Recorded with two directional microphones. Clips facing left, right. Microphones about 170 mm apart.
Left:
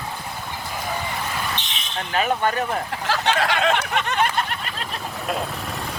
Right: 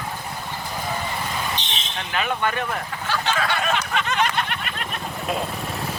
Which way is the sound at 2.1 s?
40° left (ahead or behind).